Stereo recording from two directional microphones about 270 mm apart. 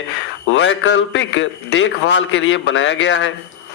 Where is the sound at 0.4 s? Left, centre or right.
Left.